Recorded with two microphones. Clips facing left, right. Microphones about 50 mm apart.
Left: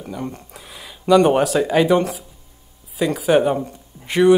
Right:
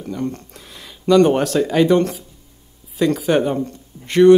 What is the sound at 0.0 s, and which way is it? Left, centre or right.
Speech, centre.